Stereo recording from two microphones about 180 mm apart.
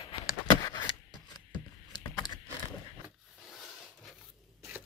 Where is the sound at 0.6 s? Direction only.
20° left (ahead or behind).